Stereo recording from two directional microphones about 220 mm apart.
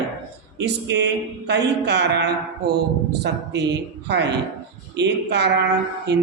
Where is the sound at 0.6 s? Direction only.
50° right (ahead or behind).